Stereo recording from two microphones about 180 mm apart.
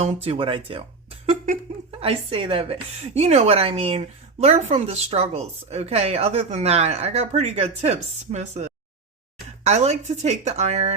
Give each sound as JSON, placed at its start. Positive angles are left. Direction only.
{"t": 0.0, "sound": "a woman's voice", "side_deg": -35}
{"t": 2.0, "sound": "a woman's voice", "side_deg": -30}